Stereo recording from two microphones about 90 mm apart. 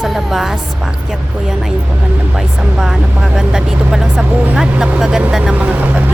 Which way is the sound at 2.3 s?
5° right (ahead or behind).